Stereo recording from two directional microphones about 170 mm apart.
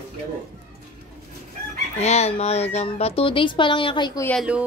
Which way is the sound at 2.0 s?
40° left (ahead or behind).